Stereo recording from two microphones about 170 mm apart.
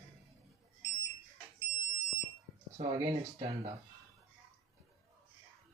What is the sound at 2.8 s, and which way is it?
Speech, 35° right (ahead or behind).